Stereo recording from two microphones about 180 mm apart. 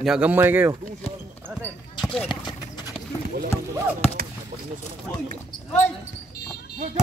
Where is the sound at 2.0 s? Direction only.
Centre (ahead or behind).